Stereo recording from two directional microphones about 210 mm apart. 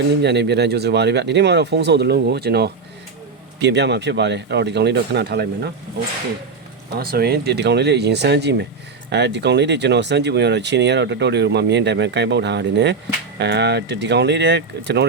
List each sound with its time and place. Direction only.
0.2 s speech: 55° right (ahead or behind)
7.0 s speech: 45° right (ahead or behind)